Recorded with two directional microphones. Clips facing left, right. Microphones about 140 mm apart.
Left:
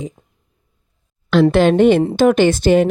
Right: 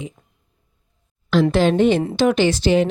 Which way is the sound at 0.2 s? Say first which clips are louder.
Left 3 dB; 25° left (ahead or behind).